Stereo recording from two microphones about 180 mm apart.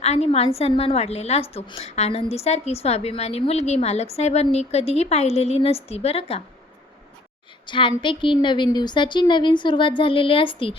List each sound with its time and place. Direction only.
0.0 s a woman's voice: 35° left (ahead or behind)
7.7 s a woman's voice: 25° left (ahead or behind)